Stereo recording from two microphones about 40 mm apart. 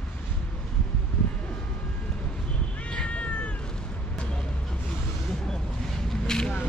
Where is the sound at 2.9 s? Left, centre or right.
Left.